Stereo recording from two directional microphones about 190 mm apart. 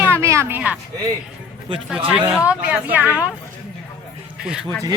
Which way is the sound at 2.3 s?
5° right (ahead or behind).